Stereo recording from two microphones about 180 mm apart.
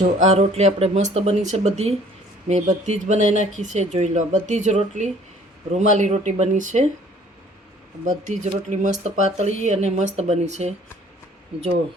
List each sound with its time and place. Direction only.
0.0 s speech: 40° right (ahead or behind)
8.0 s speech: 40° right (ahead or behind)